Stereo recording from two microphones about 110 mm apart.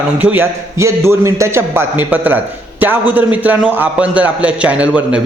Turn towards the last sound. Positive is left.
turn(degrees=-10)  # may be behind; listen again after turning